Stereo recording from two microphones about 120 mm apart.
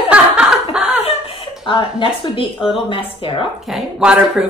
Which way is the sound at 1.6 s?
45° left (ahead or behind).